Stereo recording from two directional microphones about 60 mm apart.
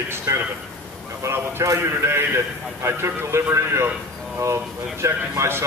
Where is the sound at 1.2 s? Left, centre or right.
Right.